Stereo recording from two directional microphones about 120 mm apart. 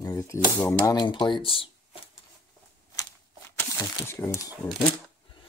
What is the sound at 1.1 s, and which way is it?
Speech, 45° left (ahead or behind).